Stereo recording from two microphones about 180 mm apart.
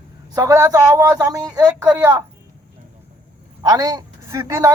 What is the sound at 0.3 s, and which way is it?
Speech, 15° right (ahead or behind).